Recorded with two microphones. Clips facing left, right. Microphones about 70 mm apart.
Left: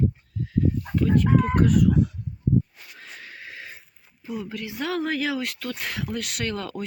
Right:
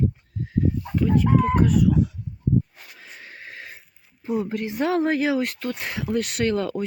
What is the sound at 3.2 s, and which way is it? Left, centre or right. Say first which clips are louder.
Neigh: right 1 dB; right.